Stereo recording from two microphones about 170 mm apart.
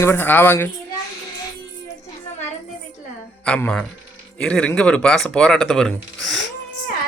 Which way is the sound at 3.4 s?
5° left (ahead or behind).